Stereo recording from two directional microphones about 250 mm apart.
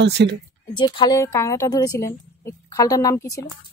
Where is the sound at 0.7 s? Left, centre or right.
Centre.